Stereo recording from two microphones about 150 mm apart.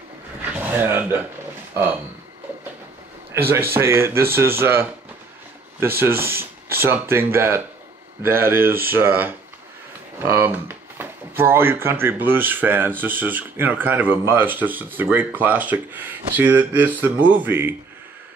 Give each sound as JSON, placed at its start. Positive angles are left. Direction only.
{"t": 0.6, "sound": "dog", "side_deg": -15}
{"t": 3.4, "sound": "speech", "side_deg": -15}